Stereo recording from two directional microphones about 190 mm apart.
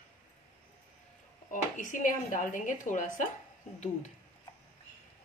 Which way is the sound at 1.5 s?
45° left (ahead or behind).